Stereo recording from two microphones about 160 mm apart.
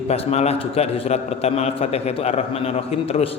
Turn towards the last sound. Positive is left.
turn(degrees=40)  # may be behind; listen again after turning